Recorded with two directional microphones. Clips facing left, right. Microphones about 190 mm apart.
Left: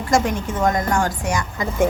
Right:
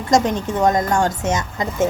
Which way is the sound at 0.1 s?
20° right (ahead or behind).